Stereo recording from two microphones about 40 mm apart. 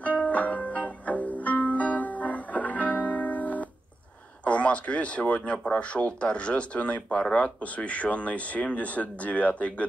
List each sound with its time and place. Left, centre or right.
0.0 s music: left
4.5 s speech: left